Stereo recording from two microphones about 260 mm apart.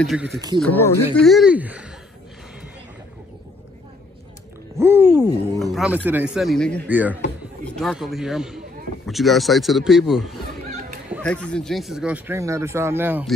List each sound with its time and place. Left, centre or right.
0.0 s speech: centre
4.7 s speech: centre
10.7 s a sound: right
11.2 s speech: centre